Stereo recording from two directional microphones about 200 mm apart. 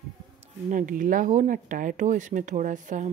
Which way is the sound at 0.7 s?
40° right (ahead or behind).